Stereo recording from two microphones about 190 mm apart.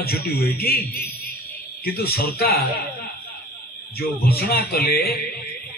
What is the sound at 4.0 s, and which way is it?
A man's voice, 55° left (ahead or behind).